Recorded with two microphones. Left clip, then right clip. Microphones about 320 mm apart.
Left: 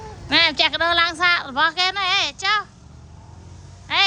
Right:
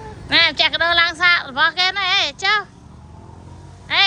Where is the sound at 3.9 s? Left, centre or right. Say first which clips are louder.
Right 2 dB; centre.